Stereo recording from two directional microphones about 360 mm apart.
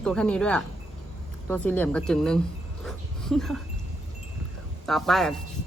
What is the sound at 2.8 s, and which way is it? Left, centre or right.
Dog, centre.